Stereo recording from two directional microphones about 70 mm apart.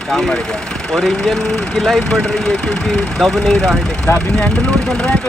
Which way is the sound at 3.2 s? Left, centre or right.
Centre.